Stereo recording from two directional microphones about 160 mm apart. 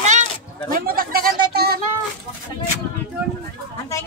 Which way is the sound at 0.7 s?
65° right (ahead or behind).